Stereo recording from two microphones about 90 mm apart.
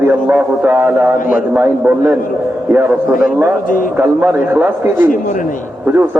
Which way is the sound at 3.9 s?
20° right (ahead or behind).